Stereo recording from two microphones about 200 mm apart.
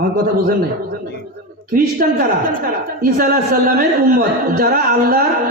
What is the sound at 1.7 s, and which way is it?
A woman's voice, 45° right (ahead or behind).